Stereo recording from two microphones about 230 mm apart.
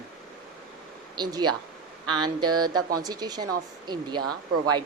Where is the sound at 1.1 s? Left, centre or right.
Centre.